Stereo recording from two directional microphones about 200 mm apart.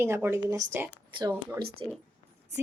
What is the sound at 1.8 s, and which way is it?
Speech, 25° right (ahead or behind).